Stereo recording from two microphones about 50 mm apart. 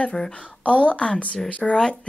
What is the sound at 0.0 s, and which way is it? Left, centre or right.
A woman's voice, left.